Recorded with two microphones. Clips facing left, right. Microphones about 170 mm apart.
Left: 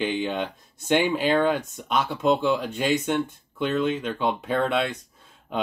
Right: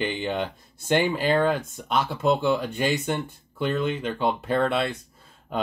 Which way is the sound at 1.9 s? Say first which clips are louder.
Left 1 dB; 5° right (ahead or behind).